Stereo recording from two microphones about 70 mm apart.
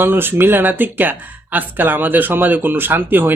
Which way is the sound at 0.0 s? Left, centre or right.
Right.